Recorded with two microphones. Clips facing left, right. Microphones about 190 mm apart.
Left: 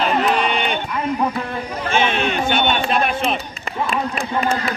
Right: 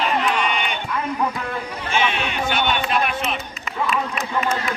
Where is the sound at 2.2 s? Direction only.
30° left (ahead or behind).